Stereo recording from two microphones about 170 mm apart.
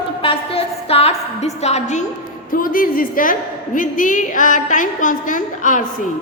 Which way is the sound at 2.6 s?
55° left (ahead or behind).